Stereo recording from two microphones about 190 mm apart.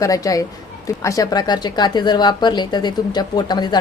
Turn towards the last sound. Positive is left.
turn(degrees=20)  # may be behind; listen again after turning